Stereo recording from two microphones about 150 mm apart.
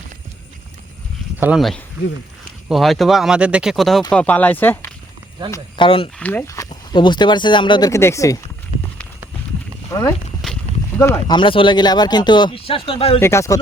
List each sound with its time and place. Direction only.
1.4 s speech: 10° right (ahead or behind)
2.6 s speech: centre (ahead or behind)
5.7 s speech: 35° left (ahead or behind)
6.1 s speech: 10° left (ahead or behind)
6.9 s speech: 30° left (ahead or behind)
10.4 s horse: centre (ahead or behind)
10.9 s speech: 15° left (ahead or behind)
11.3 s speech: 35° left (ahead or behind)
13.1 s speech: 15° left (ahead or behind)